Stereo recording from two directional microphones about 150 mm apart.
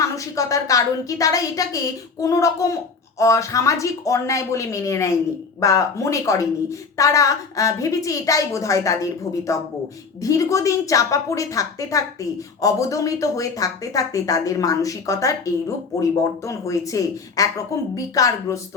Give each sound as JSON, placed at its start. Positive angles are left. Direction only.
{"t": 0.0, "sound": "speech", "side_deg": 20}